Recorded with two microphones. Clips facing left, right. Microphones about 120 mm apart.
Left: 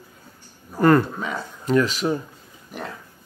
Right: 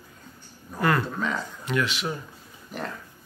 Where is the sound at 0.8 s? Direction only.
40° left (ahead or behind).